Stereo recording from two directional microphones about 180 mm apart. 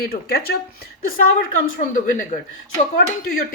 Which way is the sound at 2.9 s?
55° left (ahead or behind).